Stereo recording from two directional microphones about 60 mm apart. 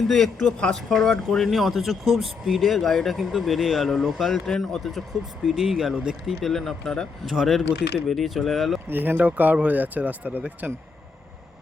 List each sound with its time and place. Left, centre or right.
0.1 s speech: centre
6.4 s speech: centre
7.3 s speech: centre
8.9 s speech: right